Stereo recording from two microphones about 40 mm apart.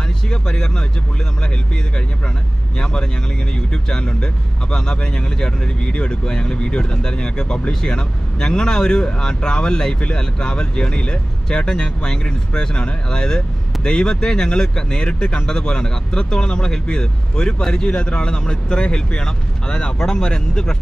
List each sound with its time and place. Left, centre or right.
0.3 s speech: centre
2.8 s speech: left